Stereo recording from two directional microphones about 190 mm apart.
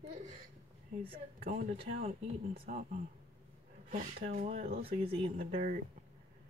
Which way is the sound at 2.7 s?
45° right (ahead or behind).